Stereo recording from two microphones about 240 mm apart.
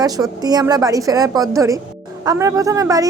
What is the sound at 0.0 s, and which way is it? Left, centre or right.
Speech, centre.